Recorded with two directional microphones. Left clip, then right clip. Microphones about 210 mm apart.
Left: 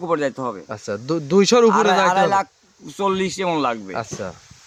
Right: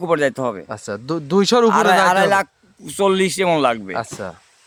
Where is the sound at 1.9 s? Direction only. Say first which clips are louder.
Right 2 dB; 60° right (ahead or behind).